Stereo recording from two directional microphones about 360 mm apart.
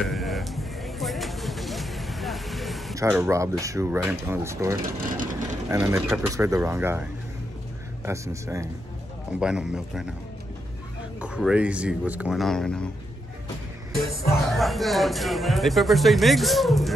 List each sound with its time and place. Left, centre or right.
0.0 s music: centre
5.1 s vehicle: right
5.7 s speech: centre
11.1 s speech: centre
14.5 s speech: centre